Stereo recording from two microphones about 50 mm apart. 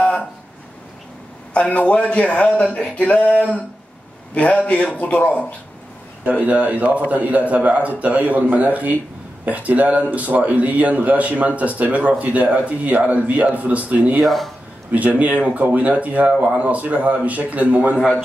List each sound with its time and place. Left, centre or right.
0.0 s a sound: left
1.5 s a man's voice: left
6.2 s speech: right
14.2 s speech: centre
14.9 s speech: right